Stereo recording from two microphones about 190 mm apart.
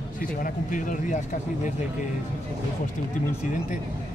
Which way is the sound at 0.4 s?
45° left (ahead or behind).